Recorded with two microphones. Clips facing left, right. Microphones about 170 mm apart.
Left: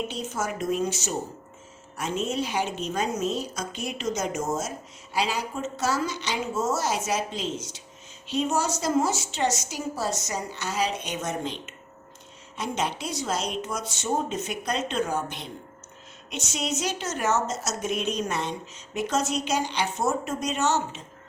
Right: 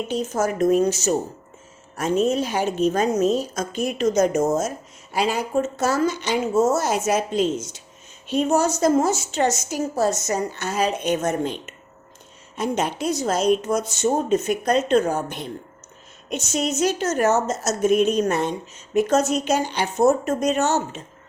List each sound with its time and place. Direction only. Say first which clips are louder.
0.1 s a woman's voice: right 8 dB; 40° right (ahead or behind)